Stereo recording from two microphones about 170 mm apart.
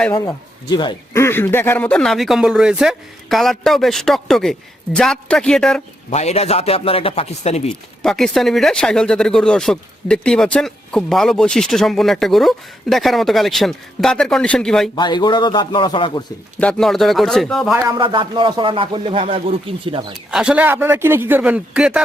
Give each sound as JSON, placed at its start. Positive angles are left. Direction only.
{"t": 0.1, "sound": "speech", "side_deg": 20}
{"t": 1.2, "sound": "speech", "side_deg": 15}
{"t": 6.1, "sound": "a man's voice", "side_deg": 40}
{"t": 8.0, "sound": "speech", "side_deg": 5}
{"t": 14.9, "sound": "speech", "side_deg": 25}
{"t": 16.6, "sound": "speech", "side_deg": 5}
{"t": 17.7, "sound": "speech", "side_deg": -25}
{"t": 20.3, "sound": "speech", "side_deg": -5}